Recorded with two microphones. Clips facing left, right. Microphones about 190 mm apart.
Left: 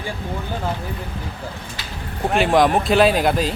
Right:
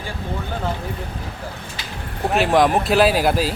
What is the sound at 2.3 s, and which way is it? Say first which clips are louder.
Speech: even; centre (ahead or behind).